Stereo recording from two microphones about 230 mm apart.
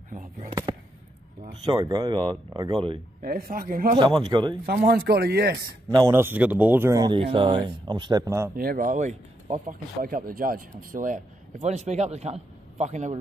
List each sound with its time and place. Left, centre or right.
1.4 s speech: right
3.2 s speech: right
4.3 s a man's voice: centre
4.8 s speech: right
5.9 s speech: centre
8.5 s a man's voice: right